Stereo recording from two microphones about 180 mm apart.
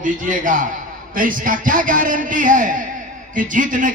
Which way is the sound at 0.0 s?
45° right (ahead or behind).